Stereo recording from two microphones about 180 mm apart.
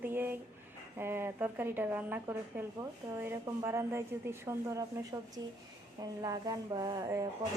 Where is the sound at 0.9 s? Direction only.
10° right (ahead or behind).